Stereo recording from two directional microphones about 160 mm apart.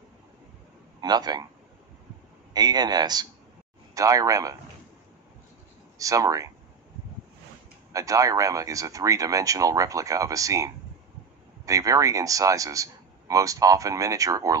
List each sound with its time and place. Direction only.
1.0 s speech: 25° right (ahead or behind)
2.5 s speech: 25° right (ahead or behind)
5.9 s speech: 20° right (ahead or behind)
7.9 s speech: 20° right (ahead or behind)